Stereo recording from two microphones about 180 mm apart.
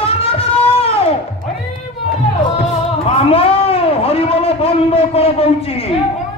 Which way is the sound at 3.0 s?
30° left (ahead or behind).